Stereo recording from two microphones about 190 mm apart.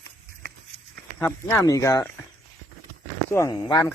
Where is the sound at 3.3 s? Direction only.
20° left (ahead or behind).